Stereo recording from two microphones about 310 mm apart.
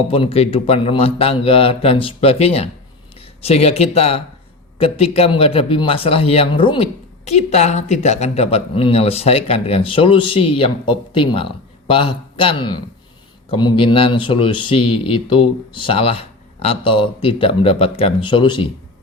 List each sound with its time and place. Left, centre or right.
0.1 s a man's voice: centre